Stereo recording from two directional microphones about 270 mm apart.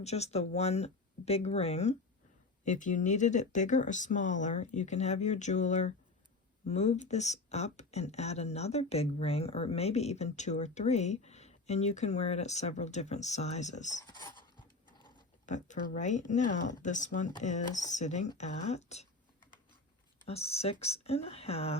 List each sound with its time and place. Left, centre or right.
0.0 s speech: left
14.1 s a sound: centre
15.4 s speech: left
20.2 s speech: left